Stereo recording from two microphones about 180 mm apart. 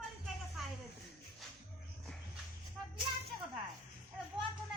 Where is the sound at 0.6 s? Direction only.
Centre (ahead or behind).